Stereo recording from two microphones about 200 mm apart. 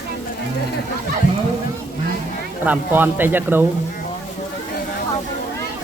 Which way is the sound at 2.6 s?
10° right (ahead or behind).